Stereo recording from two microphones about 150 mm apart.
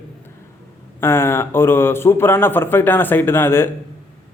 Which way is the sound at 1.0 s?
15° left (ahead or behind).